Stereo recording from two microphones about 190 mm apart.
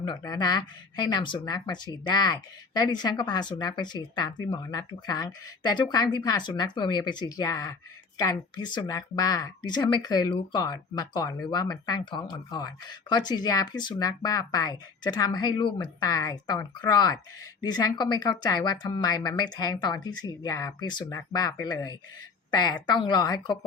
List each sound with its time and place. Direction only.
0.0 s speech: 20° left (ahead or behind)